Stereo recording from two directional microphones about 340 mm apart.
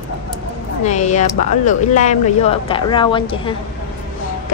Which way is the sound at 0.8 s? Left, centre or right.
Left.